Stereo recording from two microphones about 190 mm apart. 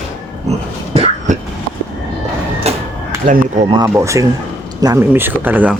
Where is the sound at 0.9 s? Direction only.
35° right (ahead or behind).